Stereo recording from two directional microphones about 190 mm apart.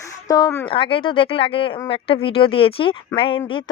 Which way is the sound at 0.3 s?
20° left (ahead or behind).